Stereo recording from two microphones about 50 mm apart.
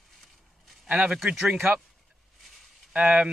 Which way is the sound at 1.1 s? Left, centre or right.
Centre.